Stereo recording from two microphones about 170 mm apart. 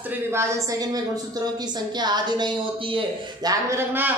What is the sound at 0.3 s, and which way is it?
Speech, 15° right (ahead or behind).